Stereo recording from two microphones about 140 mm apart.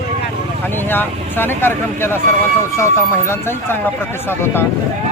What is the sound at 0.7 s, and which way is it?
Speech, 15° left (ahead or behind).